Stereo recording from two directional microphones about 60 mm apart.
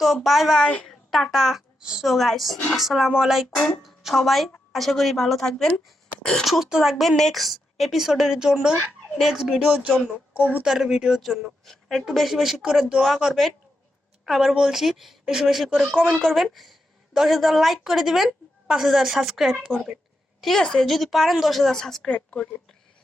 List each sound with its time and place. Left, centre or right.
0.0 s a woman's voice: centre
0.6 s speech: left
0.9 s a child's voice: centre
1.8 s speech: centre
2.0 s a woman's voice: centre
6.4 s a woman's voice: centre
7.2 s a woman's voice: centre
10.3 s speech: right
10.6 s a woman's voice: centre
20.4 s a woman's voice: centre
22.1 s speech: left